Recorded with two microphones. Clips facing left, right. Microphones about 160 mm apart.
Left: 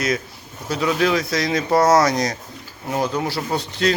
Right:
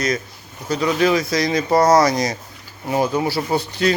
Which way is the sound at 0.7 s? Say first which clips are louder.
Right 2 dB; centre (ahead or behind).